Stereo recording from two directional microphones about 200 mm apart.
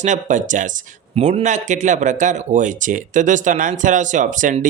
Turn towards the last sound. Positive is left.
turn(degrees=-40)  # may be behind; listen again after turning